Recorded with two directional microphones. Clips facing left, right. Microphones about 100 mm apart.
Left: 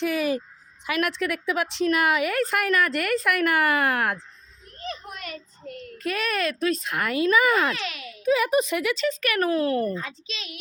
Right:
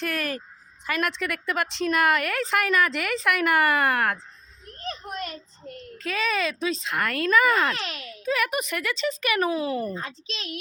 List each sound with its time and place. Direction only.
0.0 s a woman's voice: 15° left (ahead or behind)
4.8 s a sound: 35° right (ahead or behind)
6.0 s a woman's voice: 5° left (ahead or behind)
9.0 s speech: 5° right (ahead or behind)
10.0 s a woman's voice: 40° right (ahead or behind)